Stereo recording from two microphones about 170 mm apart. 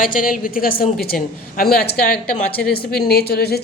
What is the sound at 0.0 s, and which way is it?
A woman's voice, 55° left (ahead or behind).